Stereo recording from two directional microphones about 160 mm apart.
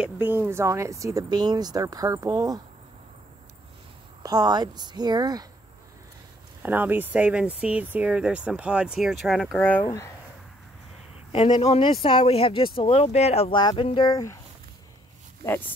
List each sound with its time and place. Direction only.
0.0 s speech: 15° right (ahead or behind)
4.2 s speech: 25° right (ahead or behind)
6.6 s speech: 10° right (ahead or behind); by 9.8 s 5° left (ahead or behind)
9.8 s speech: 20° left (ahead or behind)
11.3 s speech: 35° left (ahead or behind)